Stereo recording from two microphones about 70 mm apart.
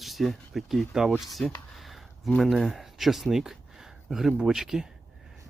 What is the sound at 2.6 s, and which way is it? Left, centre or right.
Speech, centre.